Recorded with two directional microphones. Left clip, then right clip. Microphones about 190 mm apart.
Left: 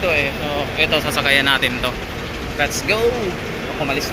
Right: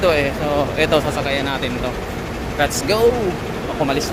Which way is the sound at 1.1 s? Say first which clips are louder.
Left 5 dB; 5° right (ahead or behind).